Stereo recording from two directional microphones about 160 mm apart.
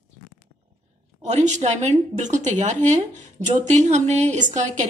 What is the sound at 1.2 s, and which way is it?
A woman's voice, 45° right (ahead or behind).